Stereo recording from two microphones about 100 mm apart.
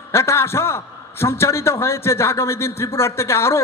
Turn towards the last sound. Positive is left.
turn(degrees=25)  # may be behind; listen again after turning